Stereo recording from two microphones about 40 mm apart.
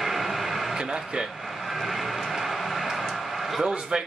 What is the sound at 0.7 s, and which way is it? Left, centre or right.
Speech, centre.